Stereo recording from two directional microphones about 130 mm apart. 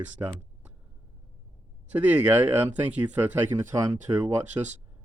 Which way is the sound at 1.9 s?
10° right (ahead or behind).